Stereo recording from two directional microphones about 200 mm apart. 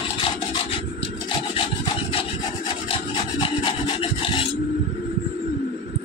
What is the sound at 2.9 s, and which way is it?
Rub, 25° left (ahead or behind).